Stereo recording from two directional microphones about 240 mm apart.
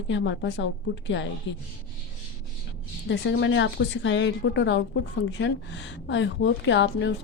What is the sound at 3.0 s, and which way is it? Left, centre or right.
A woman's voice, left.